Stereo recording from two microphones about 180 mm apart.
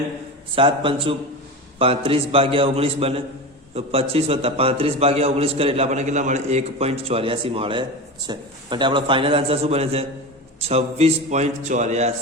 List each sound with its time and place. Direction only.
0.5 s a man's voice: 30° right (ahead or behind)